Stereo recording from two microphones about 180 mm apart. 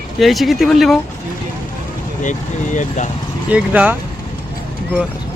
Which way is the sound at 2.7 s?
45° left (ahead or behind).